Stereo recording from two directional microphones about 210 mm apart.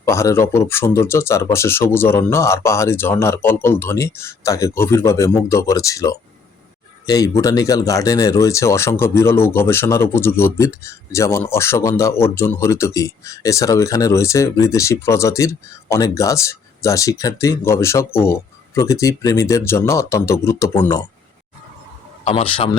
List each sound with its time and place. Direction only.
0.0 s speech: 15° left (ahead or behind)
22.2 s a man's voice: 25° left (ahead or behind)